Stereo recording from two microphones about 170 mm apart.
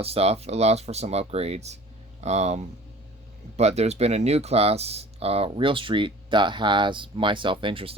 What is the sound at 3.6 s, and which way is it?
Speech, 40° right (ahead or behind).